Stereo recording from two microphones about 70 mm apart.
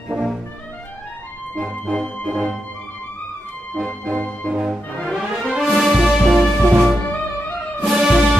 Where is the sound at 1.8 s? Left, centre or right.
Centre.